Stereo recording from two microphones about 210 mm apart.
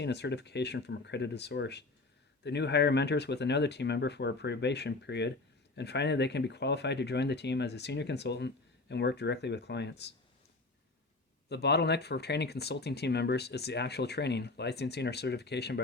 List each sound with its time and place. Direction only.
0.0 s speech: 55° left (ahead or behind)
11.4 s speech: 50° left (ahead or behind)